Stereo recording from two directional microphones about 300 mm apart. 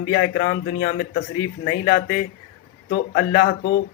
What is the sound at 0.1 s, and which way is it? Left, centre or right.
A man's voice, left.